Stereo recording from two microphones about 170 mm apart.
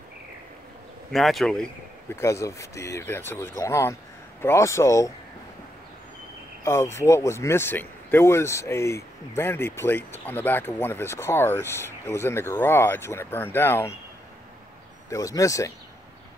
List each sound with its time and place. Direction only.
1.1 s speech: centre (ahead or behind)
2.0 s speech: 15° left (ahead or behind)
6.6 s speech: 15° left (ahead or behind)
15.0 s speech: 20° left (ahead or behind)